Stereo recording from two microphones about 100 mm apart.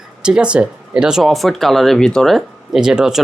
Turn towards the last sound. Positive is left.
turn(degrees=-5)  # may be behind; listen again after turning